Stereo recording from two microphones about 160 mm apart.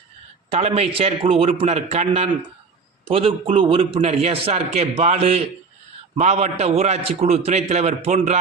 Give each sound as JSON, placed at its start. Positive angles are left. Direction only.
{"t": 0.5, "sound": "a man's voice", "side_deg": -40}